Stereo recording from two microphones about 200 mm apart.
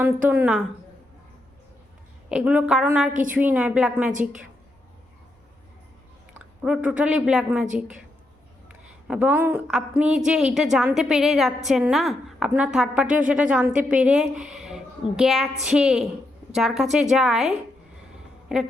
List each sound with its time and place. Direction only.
0.0 s a woman's voice: 10° right (ahead or behind)
2.3 s a woman's voice: 5° right (ahead or behind)
3.1 s a woman's voice: 40° right (ahead or behind)
3.3 s a woman's voice: 5° right (ahead or behind)
6.4 s a woman's voice: 5° right (ahead or behind)
9.0 s a woman's voice: 10° right (ahead or behind)